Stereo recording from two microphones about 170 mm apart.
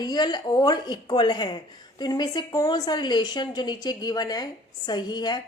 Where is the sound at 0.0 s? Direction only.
25° left (ahead or behind).